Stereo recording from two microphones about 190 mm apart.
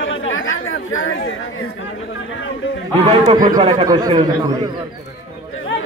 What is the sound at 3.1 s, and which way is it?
A man's voice, 30° right (ahead or behind).